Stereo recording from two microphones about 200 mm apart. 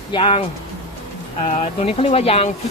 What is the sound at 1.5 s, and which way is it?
Speech, 30° left (ahead or behind).